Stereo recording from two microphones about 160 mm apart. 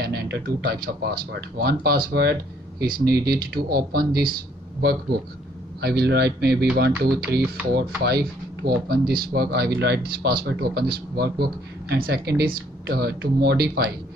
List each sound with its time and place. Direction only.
0.0 s speech: 85° right; by 4.4 s 65° right (ahead or behind)
5.8 s speech: 90° right